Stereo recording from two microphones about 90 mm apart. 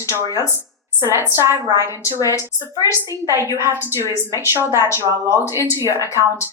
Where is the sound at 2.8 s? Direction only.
30° right (ahead or behind).